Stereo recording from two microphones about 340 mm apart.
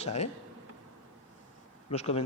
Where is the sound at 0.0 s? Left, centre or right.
Centre.